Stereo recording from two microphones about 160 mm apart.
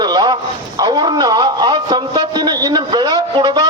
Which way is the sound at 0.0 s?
25° right (ahead or behind).